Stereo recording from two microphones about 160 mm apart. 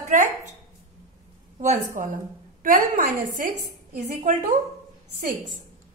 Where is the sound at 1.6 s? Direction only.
55° right (ahead or behind).